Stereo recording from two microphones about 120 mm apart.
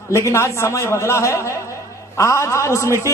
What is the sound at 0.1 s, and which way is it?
A man's voice, 25° left (ahead or behind).